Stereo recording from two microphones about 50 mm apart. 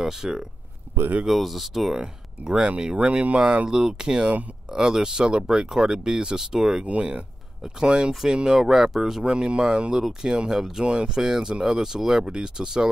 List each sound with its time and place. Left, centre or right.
0.0 s speech: centre
2.0 s speech: centre
6.9 s speech: right
8.1 s speech: centre
9.2 s speech: centre